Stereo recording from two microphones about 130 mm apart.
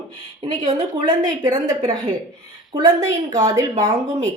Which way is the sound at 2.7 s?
30° right (ahead or behind).